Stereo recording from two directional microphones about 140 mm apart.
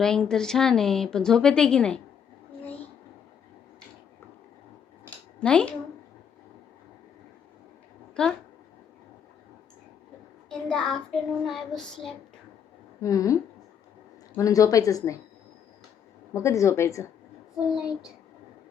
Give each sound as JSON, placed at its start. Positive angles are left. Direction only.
{"t": 0.0, "sound": "a woman's voice", "side_deg": 5}
{"t": 5.4, "sound": "speech", "side_deg": 5}
{"t": 8.1, "sound": "speech", "side_deg": 5}
{"t": 10.5, "sound": "a woman's voice", "side_deg": 5}
{"t": 13.0, "sound": "speech", "side_deg": 25}
{"t": 16.3, "sound": "speech", "side_deg": 20}
{"t": 17.7, "sound": "a woman's voice", "side_deg": -5}